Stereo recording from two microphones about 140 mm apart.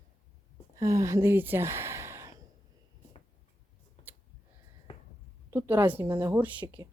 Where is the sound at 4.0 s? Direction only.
50° left (ahead or behind).